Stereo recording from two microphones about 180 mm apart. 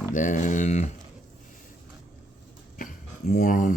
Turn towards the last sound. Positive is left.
turn(degrees=45)  # may be behind; listen again after turning